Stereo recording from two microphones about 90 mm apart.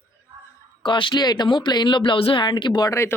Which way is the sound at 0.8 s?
65° left (ahead or behind).